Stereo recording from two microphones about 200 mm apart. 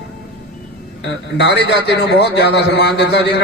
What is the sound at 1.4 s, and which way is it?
A man's voice, 60° left (ahead or behind).